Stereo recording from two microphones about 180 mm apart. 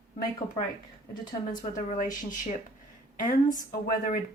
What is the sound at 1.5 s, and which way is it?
Speech, 45° left (ahead or behind).